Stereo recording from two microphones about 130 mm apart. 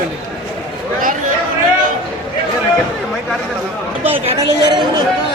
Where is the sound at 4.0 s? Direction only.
15° right (ahead or behind).